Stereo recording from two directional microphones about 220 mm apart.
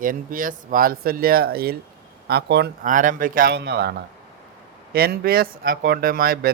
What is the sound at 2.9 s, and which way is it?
Speech, 35° right (ahead or behind).